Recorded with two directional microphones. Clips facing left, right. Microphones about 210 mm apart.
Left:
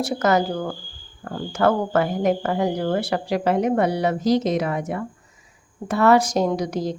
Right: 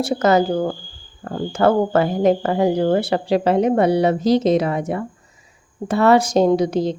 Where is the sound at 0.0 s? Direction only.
25° right (ahead or behind).